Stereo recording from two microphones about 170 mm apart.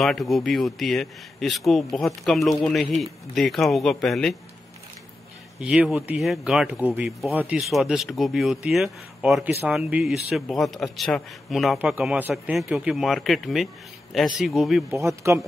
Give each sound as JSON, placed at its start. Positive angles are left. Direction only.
{"t": 0.0, "sound": "speech", "side_deg": 0}
{"t": 5.6, "sound": "speech", "side_deg": -5}
{"t": 14.9, "sound": "speech", "side_deg": -15}